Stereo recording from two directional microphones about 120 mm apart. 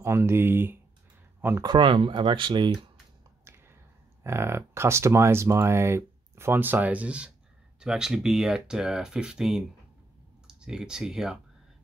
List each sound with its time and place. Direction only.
0.0 s speech: 20° right (ahead or behind)
1.6 s speech: 40° right (ahead or behind)
3.4 s a sound: 20° right (ahead or behind)
4.2 s speech: 20° right (ahead or behind); by 11.3 s 5° right (ahead or behind)